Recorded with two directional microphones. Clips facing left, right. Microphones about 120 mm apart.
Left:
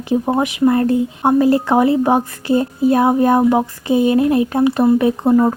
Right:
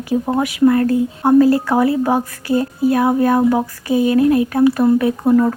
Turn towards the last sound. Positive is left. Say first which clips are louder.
# left 1 dB
turn(degrees=25)  # may be behind; listen again after turning